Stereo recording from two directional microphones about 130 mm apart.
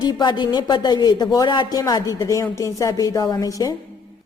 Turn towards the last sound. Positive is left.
turn(degrees=25)  # may be behind; listen again after turning